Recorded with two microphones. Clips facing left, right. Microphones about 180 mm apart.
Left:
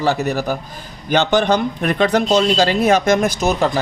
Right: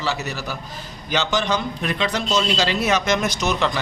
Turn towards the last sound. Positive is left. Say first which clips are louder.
# left 6 dB
turn(degrees=50)  # may be behind; listen again after turning